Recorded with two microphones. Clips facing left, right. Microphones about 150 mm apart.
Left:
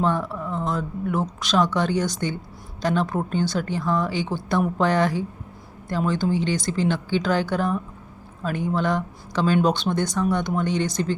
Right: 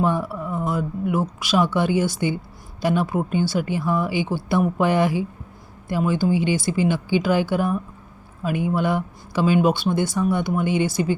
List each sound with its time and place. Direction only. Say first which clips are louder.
0.0 s speech: right 1 dB; 10° right (ahead or behind)